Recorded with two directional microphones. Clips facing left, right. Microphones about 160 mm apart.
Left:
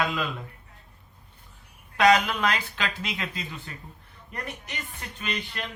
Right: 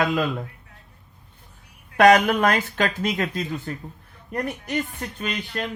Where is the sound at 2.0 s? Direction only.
50° right (ahead or behind).